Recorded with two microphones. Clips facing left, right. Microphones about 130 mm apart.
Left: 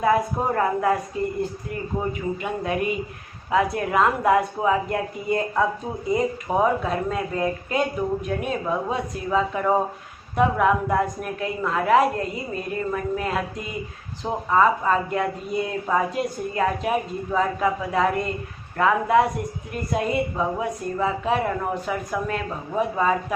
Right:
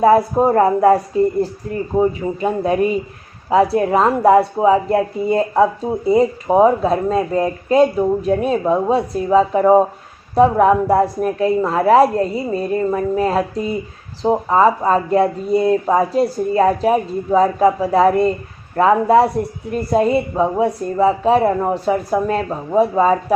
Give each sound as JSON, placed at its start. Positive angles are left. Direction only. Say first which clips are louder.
{"t": 0.0, "sound": "speech", "louder": "right 9 dB", "side_deg": -35}